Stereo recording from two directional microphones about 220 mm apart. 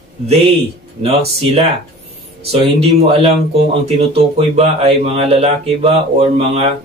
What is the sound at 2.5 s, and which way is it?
Speech, 25° right (ahead or behind).